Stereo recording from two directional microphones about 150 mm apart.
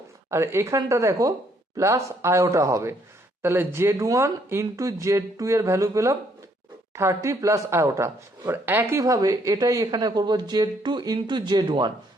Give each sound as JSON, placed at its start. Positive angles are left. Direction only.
{"t": 0.3, "sound": "speech", "side_deg": -20}